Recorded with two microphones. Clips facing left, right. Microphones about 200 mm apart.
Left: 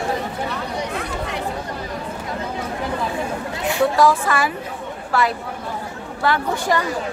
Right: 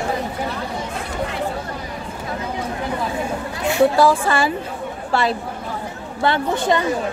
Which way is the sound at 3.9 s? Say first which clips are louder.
Right 1 dB; 30° right (ahead or behind).